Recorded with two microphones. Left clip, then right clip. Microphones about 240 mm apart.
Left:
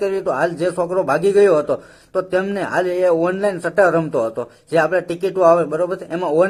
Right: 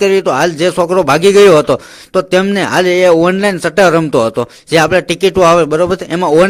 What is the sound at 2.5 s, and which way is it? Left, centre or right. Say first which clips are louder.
Speech: right 8 dB; right.